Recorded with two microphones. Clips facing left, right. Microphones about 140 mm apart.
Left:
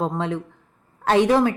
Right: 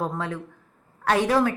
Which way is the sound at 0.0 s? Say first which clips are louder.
Left 4 dB; 20° left (ahead or behind).